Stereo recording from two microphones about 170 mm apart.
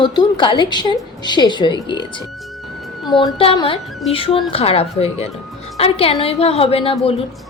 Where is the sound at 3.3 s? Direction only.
30° left (ahead or behind).